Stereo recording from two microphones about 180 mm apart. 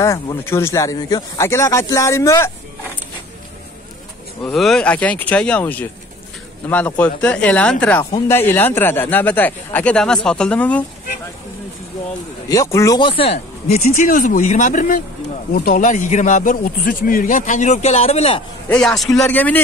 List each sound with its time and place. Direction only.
0.0 s a man's voice: 15° left (ahead or behind)
4.4 s a man's voice: centre (ahead or behind)
7.0 s a man's voice: 5° left (ahead or behind)
12.4 s speech: 20° left (ahead or behind); by 18.4 s 35° left (ahead or behind)
18.7 s a man's voice: 5° left (ahead or behind)